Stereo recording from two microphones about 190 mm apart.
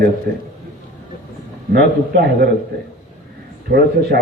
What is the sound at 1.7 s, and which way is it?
Speech, 55° right (ahead or behind).